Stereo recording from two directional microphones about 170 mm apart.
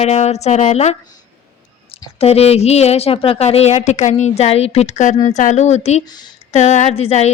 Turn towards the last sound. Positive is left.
turn(degrees=40)  # may be behind; listen again after turning